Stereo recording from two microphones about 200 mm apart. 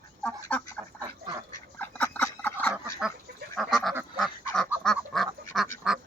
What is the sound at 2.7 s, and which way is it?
Fowl, 5° right (ahead or behind).